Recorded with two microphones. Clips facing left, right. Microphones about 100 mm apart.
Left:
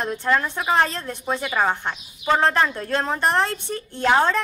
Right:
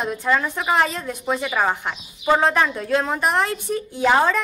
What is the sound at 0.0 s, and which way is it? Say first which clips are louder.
Speech: right 1 dB; 5° right (ahead or behind).